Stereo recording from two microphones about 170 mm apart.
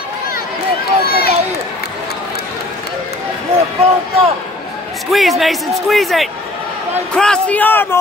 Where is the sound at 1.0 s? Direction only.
65° left (ahead or behind).